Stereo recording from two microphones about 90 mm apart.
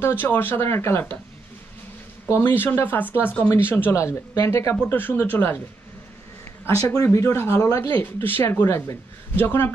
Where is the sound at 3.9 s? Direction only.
35° left (ahead or behind).